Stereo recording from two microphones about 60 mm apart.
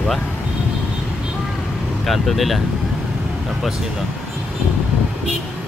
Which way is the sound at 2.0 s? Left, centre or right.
Centre.